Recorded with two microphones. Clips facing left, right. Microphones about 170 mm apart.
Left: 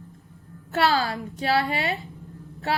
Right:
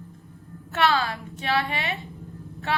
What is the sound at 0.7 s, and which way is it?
A woman's voice, 35° left (ahead or behind).